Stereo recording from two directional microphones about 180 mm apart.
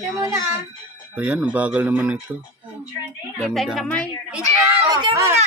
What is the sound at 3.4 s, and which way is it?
Speech, centre (ahead or behind).